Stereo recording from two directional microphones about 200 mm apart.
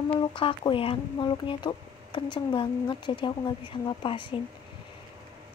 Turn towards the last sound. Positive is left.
turn(degrees=25)  # may be behind; listen again after turning